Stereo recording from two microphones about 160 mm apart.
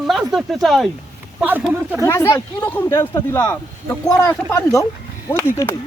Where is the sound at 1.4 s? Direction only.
10° right (ahead or behind).